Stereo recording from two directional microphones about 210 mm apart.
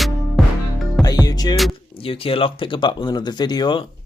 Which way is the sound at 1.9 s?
25° left (ahead or behind).